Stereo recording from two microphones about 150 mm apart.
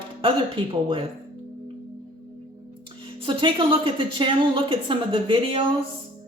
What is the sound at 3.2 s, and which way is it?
A woman's voice, 35° right (ahead or behind).